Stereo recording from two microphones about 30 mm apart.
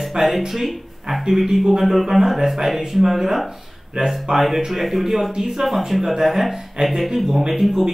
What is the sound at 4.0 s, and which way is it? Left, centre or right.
Speech, right.